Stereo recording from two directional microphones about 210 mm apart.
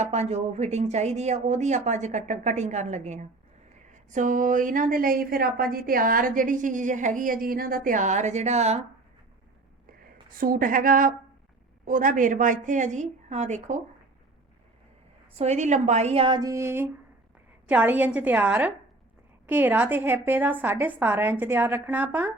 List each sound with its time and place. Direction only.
0.0 s a woman's voice: 30° right (ahead or behind)
10.0 s a woman's voice: 40° right (ahead or behind)
15.4 s a woman's voice: 30° right (ahead or behind); by 22.3 s 10° right (ahead or behind)